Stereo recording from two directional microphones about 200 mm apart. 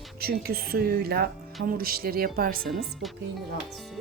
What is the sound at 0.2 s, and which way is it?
A woman's voice, 50° right (ahead or behind).